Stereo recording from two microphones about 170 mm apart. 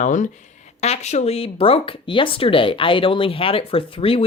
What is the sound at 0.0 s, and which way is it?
Speech, 45° left (ahead or behind).